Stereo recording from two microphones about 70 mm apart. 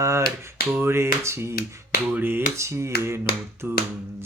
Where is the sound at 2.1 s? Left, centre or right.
Right.